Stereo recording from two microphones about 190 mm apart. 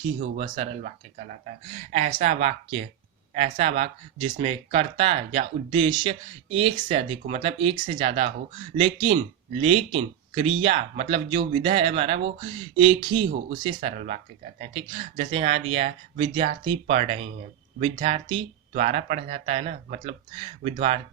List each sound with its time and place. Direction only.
0.2 s speech: 40° right (ahead or behind); by 13.7 s 25° right (ahead or behind)
13.7 s speech: 35° right (ahead or behind)